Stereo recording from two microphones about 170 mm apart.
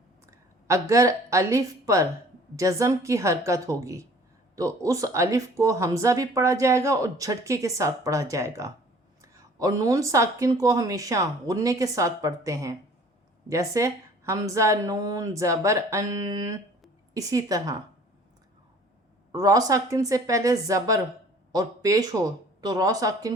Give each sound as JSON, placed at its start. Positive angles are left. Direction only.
{"t": 0.3, "sound": "a woman's voice", "side_deg": -20}
{"t": 19.3, "sound": "speech", "side_deg": -20}